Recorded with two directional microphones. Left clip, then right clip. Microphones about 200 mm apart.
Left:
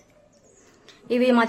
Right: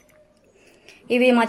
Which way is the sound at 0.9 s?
15° right (ahead or behind).